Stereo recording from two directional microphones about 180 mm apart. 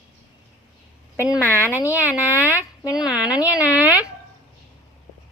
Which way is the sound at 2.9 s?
5° right (ahead or behind).